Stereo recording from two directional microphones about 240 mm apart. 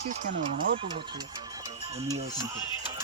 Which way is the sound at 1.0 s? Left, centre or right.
Centre.